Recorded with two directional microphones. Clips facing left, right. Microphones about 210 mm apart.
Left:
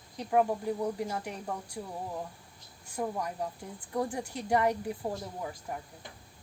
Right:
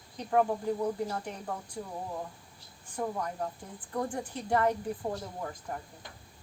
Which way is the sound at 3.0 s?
10° left (ahead or behind).